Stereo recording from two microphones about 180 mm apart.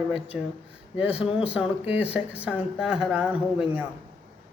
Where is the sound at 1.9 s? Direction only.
10° right (ahead or behind).